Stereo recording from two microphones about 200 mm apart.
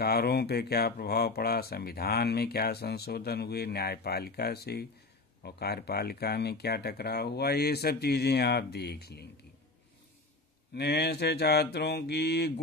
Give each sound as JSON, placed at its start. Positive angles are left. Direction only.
{"t": 0.0, "sound": "speech", "side_deg": 50}
{"t": 10.7, "sound": "mantra", "side_deg": 55}